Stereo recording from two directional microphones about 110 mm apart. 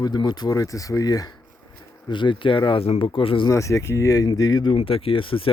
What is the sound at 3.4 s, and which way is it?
Speech, 30° left (ahead or behind).